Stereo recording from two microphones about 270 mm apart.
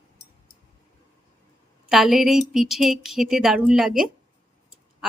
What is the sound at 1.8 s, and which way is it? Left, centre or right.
Speech, centre.